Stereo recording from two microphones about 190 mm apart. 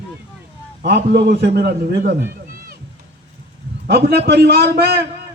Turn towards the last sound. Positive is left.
turn(degrees=-55)  # may be behind; listen again after turning